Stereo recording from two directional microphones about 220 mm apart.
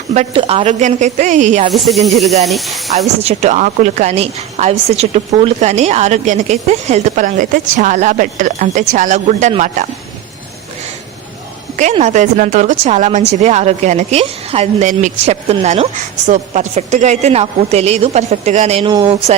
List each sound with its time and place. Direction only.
0.1 s a woman's voice: 30° right (ahead or behind)
1.7 s speech: centre (ahead or behind)
3.2 s a woman's voice: 30° right (ahead or behind)
11.8 s a woman's voice: 30° right (ahead or behind)
18.9 s speech: 20° right (ahead or behind)